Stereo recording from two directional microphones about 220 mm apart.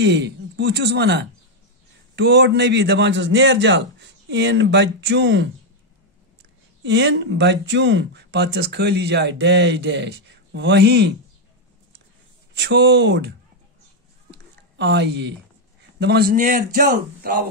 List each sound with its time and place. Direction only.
0.0 s speech: 50° right (ahead or behind)
6.8 s speech: 55° right (ahead or behind)
12.5 s speech: 50° right (ahead or behind)
14.3 s a sound: 50° right (ahead or behind)
16.0 s speech: 45° right (ahead or behind)